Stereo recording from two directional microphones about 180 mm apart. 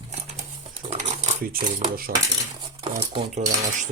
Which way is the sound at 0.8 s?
35° right (ahead or behind).